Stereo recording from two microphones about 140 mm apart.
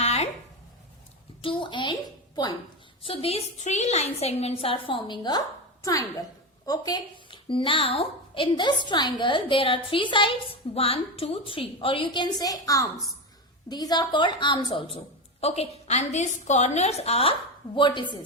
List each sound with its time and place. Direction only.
0.0 s a sound: 50° left (ahead or behind)
1.4 s a child's voice: 35° left (ahead or behind)
3.0 s a woman's voice: 45° left (ahead or behind)
15.4 s a woman's voice: 45° left (ahead or behind)
17.7 s a woman's voice: 35° left (ahead or behind)